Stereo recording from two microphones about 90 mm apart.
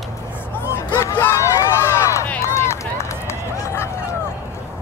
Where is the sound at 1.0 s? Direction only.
35° left (ahead or behind).